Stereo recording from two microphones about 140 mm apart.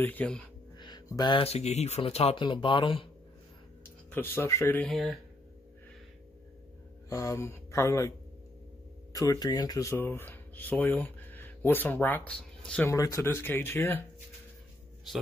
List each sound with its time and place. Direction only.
0.0 s speech: 10° left (ahead or behind)
0.7 s a sound: 30° left (ahead or behind)
1.4 s speech: 50° left (ahead or behind)
4.1 s speech: 15° left (ahead or behind)
7.1 s speech: 20° left (ahead or behind)
9.1 s speech: 25° left (ahead or behind); by 12.9 s 10° left (ahead or behind)
12.9 s speech: 20° left (ahead or behind)